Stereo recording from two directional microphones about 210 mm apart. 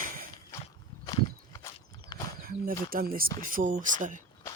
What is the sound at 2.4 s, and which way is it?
Speech, 45° right (ahead or behind).